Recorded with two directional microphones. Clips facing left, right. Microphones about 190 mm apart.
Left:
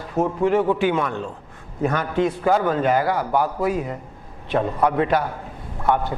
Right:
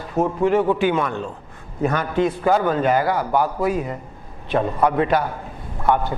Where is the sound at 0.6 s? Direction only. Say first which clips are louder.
Right 1 dB; 15° right (ahead or behind).